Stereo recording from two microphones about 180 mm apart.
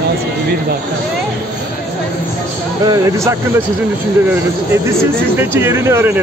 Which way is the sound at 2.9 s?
20° right (ahead or behind).